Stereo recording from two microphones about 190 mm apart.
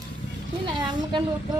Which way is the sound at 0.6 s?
25° right (ahead or behind).